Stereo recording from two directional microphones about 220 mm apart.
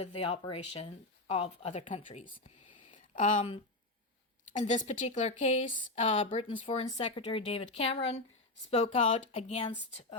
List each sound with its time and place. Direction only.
0.0 s a woman's voice: 25° left (ahead or behind)
2.8 s a sound: 35° left (ahead or behind)
4.5 s a woman's voice: 35° left (ahead or behind)